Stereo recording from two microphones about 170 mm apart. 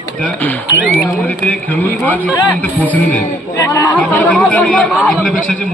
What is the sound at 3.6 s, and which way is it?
Speech, 20° left (ahead or behind).